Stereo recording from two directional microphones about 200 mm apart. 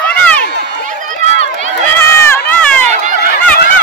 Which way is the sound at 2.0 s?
10° left (ahead or behind).